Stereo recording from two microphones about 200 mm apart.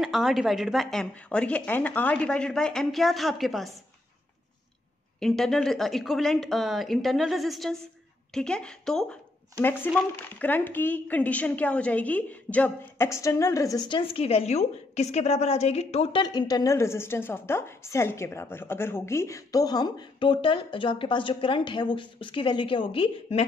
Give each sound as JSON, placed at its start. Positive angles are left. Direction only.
{"t": 0.0, "sound": "speech", "side_deg": 0}
{"t": 5.2, "sound": "a woman's voice", "side_deg": 0}